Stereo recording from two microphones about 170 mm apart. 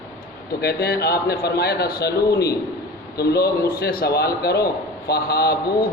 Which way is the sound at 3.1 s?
70° left (ahead or behind).